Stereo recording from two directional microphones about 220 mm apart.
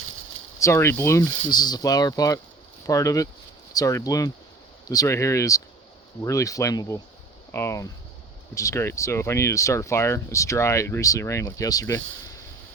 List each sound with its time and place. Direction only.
0.6 s speech: 10° left (ahead or behind)